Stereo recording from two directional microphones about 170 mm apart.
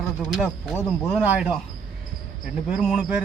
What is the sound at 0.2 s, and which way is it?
Speech, centre (ahead or behind).